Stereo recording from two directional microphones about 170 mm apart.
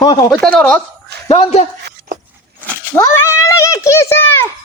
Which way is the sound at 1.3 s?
35° left (ahead or behind).